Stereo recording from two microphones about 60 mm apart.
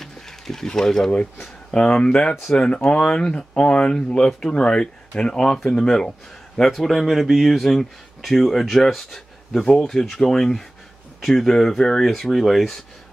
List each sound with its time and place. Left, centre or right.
0.0 s a sound: centre
1.7 s speech: centre
6.7 s speech: centre